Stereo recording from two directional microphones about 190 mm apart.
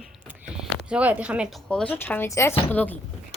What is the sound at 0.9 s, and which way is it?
Speech, 5° right (ahead or behind).